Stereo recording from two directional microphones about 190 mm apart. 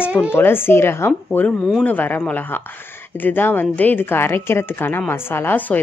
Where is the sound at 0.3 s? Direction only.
10° left (ahead or behind).